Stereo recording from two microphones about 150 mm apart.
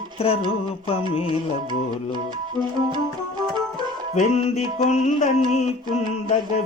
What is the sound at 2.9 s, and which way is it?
Music, 30° right (ahead or behind).